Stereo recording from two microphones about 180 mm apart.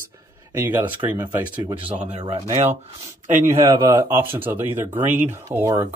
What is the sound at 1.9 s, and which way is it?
Speech, 40° right (ahead or behind).